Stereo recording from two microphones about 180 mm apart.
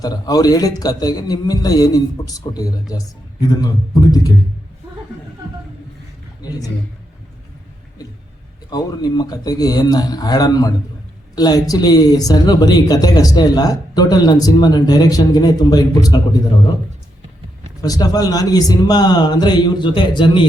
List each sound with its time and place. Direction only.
0.0 s speech: 20° left (ahead or behind)
8.7 s speech: 20° left (ahead or behind)
17.8 s speech: 20° left (ahead or behind)